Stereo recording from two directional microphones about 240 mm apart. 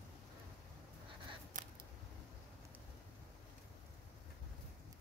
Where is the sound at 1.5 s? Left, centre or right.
Right.